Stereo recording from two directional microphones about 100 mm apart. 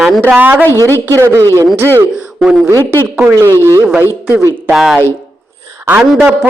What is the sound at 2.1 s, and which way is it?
Speech, 10° right (ahead or behind).